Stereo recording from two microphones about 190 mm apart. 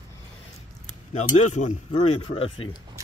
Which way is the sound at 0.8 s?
40° left (ahead or behind).